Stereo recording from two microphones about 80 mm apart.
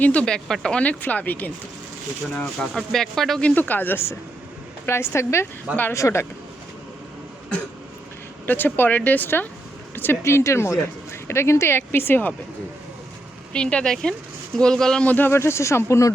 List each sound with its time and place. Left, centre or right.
0.0 s speech: centre
2.6 s speech: centre
3.4 s speech: left
8.4 s speech: left
13.5 s speech: centre
15.0 s speech: left